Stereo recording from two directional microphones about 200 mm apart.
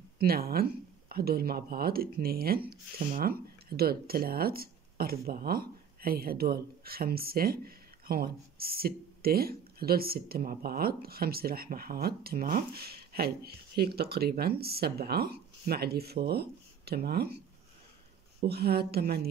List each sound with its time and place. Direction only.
0.2 s speech: 50° right (ahead or behind)
18.5 s speech: 50° right (ahead or behind)